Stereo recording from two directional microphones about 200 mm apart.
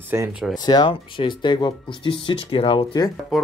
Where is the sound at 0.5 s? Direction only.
20° left (ahead or behind).